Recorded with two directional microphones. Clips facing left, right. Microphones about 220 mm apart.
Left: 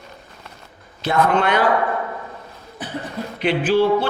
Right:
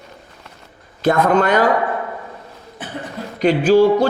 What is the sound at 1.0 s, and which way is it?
Speech, 40° right (ahead or behind).